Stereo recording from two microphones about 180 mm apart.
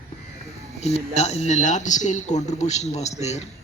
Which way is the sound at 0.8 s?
35° left (ahead or behind).